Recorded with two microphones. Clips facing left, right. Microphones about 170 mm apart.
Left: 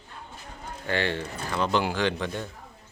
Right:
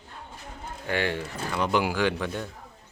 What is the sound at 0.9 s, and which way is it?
Speech, 10° right (ahead or behind).